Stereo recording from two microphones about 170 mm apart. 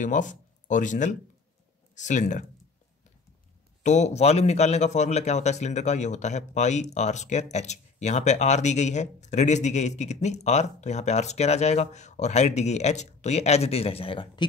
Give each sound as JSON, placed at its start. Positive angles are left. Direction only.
{"t": 0.0, "sound": "speech", "side_deg": 50}
{"t": 3.8, "sound": "a man's voice", "side_deg": 45}